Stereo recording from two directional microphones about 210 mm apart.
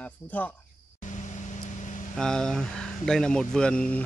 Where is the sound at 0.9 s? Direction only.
35° left (ahead or behind).